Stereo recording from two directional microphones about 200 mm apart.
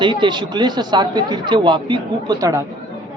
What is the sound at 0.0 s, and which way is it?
Speech, 25° right (ahead or behind).